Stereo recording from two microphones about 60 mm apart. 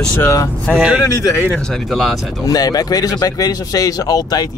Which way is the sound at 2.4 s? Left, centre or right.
Left.